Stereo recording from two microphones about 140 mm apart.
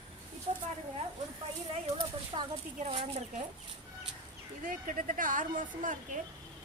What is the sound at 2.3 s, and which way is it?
Speech, 35° right (ahead or behind).